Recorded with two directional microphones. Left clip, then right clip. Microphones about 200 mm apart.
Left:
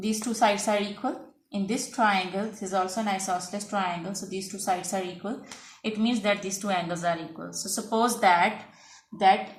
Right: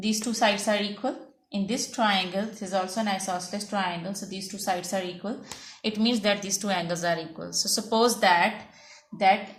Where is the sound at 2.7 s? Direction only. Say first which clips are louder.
Even; 35° right (ahead or behind).